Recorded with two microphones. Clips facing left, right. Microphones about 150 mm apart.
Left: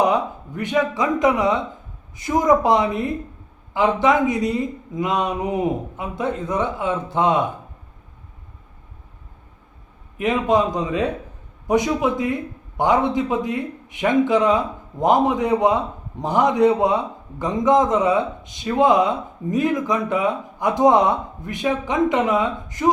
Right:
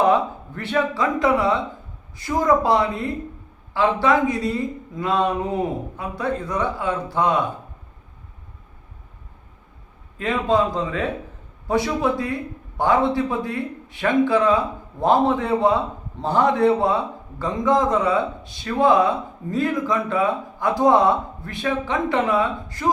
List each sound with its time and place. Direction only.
0.0 s a man's voice: 15° left (ahead or behind)
10.2 s a man's voice: 20° left (ahead or behind)